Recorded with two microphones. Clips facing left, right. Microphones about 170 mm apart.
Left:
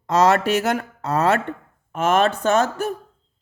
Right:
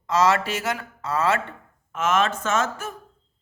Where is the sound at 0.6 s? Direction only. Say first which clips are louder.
Left 6 dB; 40° left (ahead or behind).